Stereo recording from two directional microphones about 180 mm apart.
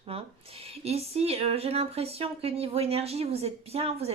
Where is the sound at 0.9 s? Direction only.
35° right (ahead or behind).